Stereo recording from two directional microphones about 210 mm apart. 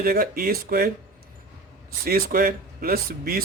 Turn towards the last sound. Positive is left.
turn(degrees=-45)  # may be behind; listen again after turning